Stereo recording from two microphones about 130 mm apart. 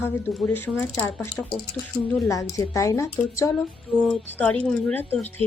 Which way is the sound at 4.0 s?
5° left (ahead or behind).